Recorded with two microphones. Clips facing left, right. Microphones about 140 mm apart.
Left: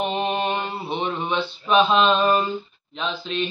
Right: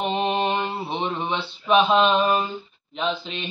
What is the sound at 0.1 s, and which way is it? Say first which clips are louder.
Mantra: right 1 dB; 20° right (ahead or behind).